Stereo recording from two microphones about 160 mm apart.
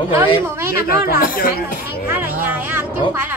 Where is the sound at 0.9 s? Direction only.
70° left (ahead or behind).